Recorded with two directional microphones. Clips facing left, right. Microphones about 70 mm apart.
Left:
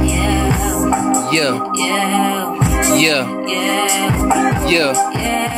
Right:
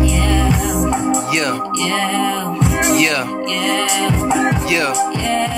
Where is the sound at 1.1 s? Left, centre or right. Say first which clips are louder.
Left 2 dB; centre.